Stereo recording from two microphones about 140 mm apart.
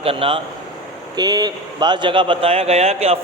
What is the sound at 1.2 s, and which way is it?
A man's voice, 30° right (ahead or behind).